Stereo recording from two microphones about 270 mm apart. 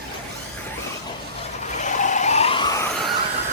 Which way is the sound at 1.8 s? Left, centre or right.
Left.